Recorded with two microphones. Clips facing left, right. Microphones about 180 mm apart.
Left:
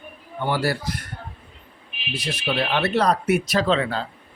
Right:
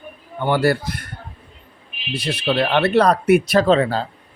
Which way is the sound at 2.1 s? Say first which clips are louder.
Right 5 dB; 60° right (ahead or behind).